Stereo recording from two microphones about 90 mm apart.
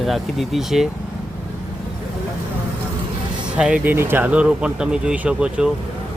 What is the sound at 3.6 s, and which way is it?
Speech, 10° right (ahead or behind).